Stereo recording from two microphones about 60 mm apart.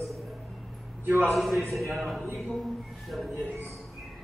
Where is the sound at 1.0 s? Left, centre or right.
Right.